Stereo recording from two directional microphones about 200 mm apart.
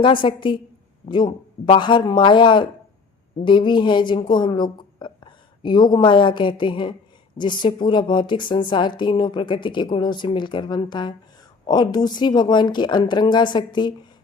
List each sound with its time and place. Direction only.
0.0 s a woman's voice: 25° left (ahead or behind)